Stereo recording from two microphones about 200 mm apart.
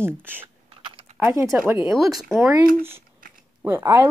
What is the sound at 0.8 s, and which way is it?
Typing, 25° right (ahead or behind).